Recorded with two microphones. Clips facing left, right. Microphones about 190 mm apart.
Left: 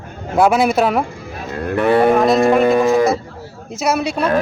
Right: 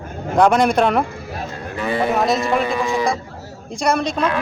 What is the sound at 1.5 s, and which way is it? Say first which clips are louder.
Speech: left 8 dB; 60° left (ahead or behind).